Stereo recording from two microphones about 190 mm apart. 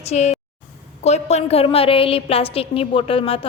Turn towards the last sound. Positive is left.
turn(degrees=30)  # may be behind; listen again after turning